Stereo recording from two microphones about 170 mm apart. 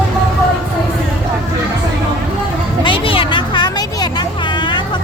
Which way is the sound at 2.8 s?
30° left (ahead or behind).